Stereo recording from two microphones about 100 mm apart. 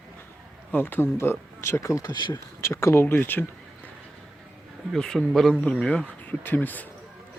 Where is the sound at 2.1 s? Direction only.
50° left (ahead or behind).